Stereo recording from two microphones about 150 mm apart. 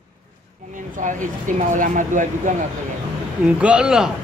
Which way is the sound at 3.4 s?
10° right (ahead or behind).